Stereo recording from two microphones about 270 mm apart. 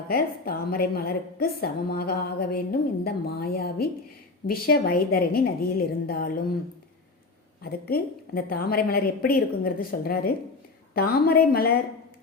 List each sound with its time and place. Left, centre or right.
0.1 s a woman's voice: left
7.6 s a woman's voice: left